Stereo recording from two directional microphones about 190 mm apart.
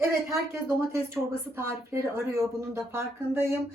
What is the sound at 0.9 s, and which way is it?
Speech, 15° right (ahead or behind).